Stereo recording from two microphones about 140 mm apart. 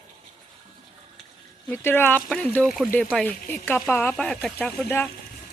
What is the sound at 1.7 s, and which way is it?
Speech, 15° left (ahead or behind).